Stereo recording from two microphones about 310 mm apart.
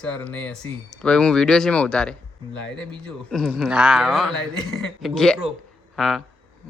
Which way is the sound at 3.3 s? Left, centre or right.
Centre.